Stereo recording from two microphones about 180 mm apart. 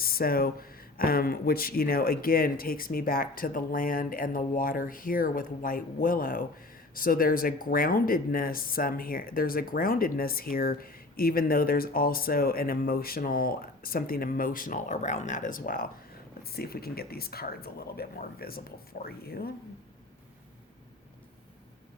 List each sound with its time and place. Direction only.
0.0 s speech: 55° left (ahead or behind)